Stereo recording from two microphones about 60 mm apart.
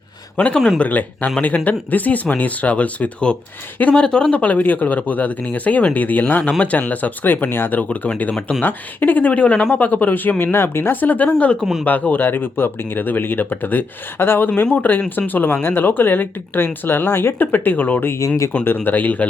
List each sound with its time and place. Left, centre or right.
0.3 s speech: left
7.5 s speech: left
8.3 s speech: centre
8.6 s speech: left
11.1 s speech: left
11.6 s speech: centre
11.9 s speech: left